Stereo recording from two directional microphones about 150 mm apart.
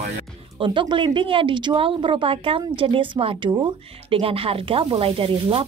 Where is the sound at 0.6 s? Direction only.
30° right (ahead or behind).